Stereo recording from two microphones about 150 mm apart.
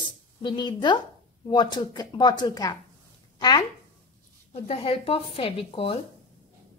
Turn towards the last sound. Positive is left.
turn(degrees=40)  # may be behind; listen again after turning